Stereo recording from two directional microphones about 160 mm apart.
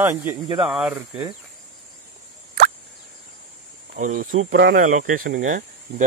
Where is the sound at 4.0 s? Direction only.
55° right (ahead or behind).